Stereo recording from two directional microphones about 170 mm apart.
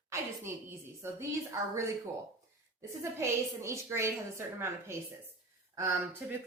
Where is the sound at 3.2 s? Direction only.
15° right (ahead or behind).